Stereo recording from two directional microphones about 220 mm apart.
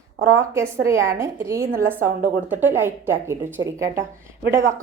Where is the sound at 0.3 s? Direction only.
10° right (ahead or behind).